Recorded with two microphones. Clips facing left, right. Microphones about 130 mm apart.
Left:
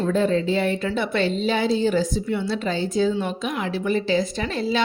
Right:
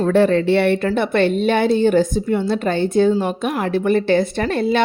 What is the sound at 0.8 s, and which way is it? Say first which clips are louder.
A woman's voice: right 6 dB; 55° right (ahead or behind).